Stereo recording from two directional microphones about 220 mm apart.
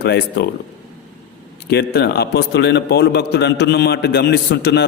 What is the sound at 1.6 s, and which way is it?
A man's voice, 45° left (ahead or behind).